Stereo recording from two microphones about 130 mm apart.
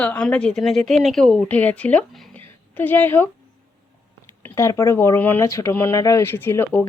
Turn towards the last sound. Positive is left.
turn(degrees=15)  # may be behind; listen again after turning